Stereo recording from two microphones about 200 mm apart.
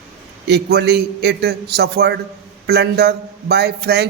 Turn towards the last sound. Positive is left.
turn(degrees=-55)  # may be behind; listen again after turning